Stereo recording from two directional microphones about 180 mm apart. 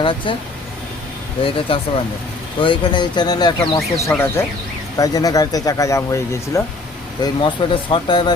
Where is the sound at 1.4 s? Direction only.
30° left (ahead or behind).